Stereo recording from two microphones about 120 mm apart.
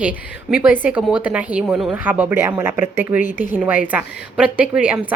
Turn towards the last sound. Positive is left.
turn(degrees=-10)  # may be behind; listen again after turning